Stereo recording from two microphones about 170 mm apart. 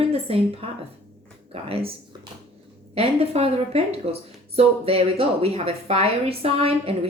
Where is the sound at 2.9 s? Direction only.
35° right (ahead or behind).